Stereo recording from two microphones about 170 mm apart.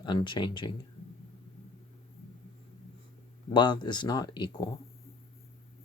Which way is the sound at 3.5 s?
25° left (ahead or behind).